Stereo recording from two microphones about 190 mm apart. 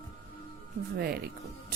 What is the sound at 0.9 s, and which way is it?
Speech, 55° right (ahead or behind).